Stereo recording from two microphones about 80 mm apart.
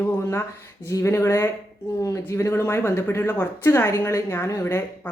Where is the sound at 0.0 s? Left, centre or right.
Left.